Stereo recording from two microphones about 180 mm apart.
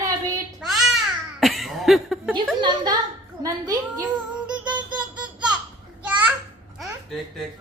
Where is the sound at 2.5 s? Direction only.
25° right (ahead or behind).